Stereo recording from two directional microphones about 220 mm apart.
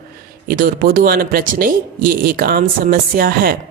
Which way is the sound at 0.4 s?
40° right (ahead or behind).